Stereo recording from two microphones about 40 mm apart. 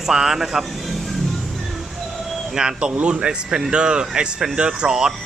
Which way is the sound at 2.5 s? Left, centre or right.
Right.